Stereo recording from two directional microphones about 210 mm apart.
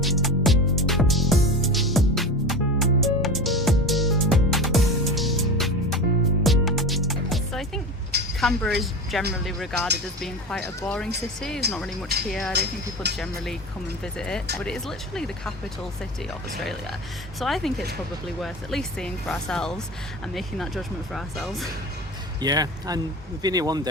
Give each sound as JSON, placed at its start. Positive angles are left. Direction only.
{"t": 0.0, "sound": "music", "side_deg": 0}
{"t": 8.4, "sound": "speech", "side_deg": 0}
{"t": 12.5, "sound": "speech", "side_deg": -50}
{"t": 13.1, "sound": "speech", "side_deg": 0}
{"t": 17.4, "sound": "speech", "side_deg": 0}
{"t": 22.4, "sound": "speech", "side_deg": -20}